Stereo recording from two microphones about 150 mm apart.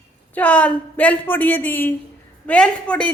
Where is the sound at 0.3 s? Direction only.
10° left (ahead or behind).